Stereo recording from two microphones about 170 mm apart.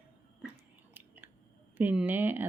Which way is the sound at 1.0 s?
10° right (ahead or behind).